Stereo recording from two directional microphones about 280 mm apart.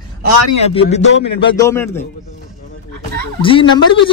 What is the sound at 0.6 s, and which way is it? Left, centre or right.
Speech, left.